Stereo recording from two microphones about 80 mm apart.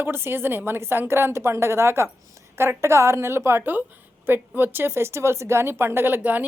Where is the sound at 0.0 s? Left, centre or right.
Right.